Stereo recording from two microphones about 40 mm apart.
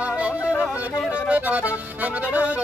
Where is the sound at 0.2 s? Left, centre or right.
Right.